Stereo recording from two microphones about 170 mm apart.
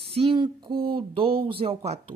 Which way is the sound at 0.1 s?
30° right (ahead or behind).